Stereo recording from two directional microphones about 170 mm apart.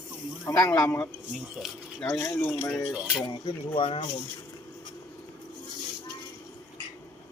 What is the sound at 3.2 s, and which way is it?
Speech, 25° left (ahead or behind).